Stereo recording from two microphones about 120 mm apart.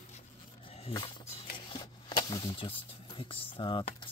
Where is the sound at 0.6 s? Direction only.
55° left (ahead or behind).